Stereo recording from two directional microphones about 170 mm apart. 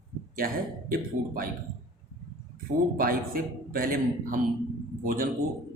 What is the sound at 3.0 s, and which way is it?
Speech, 60° right (ahead or behind).